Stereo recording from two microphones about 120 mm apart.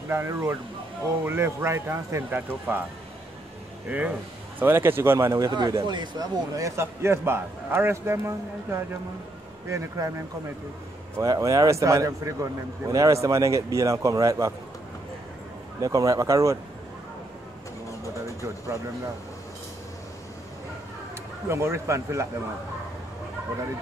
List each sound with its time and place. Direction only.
0.1 s a man's voice: 25° right (ahead or behind)
3.9 s a man's voice: 10° right (ahead or behind)
5.5 s a man's voice: 40° right (ahead or behind)
11.1 s a man's voice: 30° right (ahead or behind)
15.8 s a man's voice: 30° right (ahead or behind)
21.5 s a man's voice: 25° right (ahead or behind)